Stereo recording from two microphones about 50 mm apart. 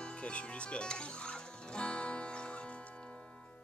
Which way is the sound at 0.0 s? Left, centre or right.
Left.